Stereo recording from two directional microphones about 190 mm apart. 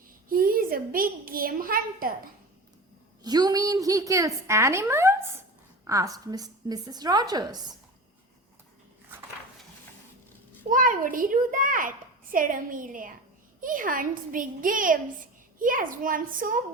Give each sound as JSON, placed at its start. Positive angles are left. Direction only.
{"t": 0.3, "sound": "a child's voice", "side_deg": -50}
{"t": 3.2, "sound": "a woman's voice", "side_deg": -20}
{"t": 10.7, "sound": "a woman's voice", "side_deg": -45}